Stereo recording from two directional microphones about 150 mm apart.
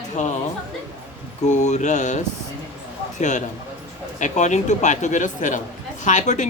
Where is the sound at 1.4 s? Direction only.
50° left (ahead or behind).